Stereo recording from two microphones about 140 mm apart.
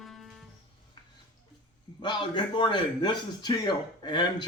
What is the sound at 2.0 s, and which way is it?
A man's voice, 35° left (ahead or behind).